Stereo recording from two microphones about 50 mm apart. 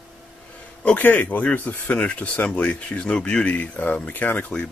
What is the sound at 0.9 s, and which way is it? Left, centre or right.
Speech, left.